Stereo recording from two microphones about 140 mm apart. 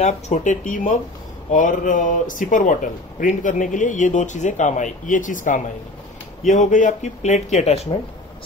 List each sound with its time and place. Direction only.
0.0 s speech: 60° left (ahead or behind)